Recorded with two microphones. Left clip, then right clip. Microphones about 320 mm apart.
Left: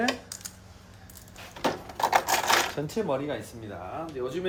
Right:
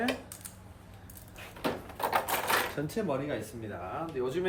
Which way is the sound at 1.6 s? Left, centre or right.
Left.